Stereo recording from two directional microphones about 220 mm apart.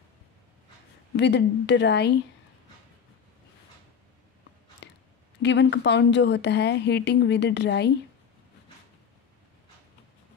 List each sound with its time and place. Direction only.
1.1 s a woman's voice: 50° left (ahead or behind)
4.8 s a sound: 50° left (ahead or behind)
5.4 s a woman's voice: 55° left (ahead or behind)